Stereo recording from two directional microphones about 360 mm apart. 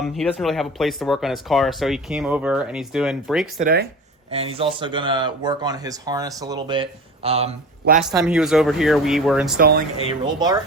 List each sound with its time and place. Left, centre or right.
0.0 s speech: centre
3.6 s speech: right
8.0 s speech: centre
9.6 s speech: right